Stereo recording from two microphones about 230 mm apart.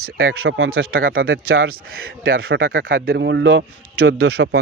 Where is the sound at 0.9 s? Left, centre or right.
Right.